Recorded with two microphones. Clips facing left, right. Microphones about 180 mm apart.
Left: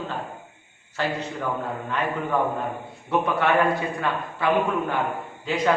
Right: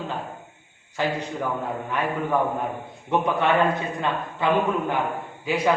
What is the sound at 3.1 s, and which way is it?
Speech, 20° right (ahead or behind).